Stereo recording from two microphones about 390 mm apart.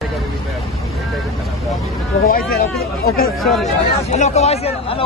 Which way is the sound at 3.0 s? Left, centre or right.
Left.